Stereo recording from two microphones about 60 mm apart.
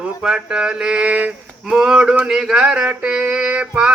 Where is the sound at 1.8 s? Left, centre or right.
Centre.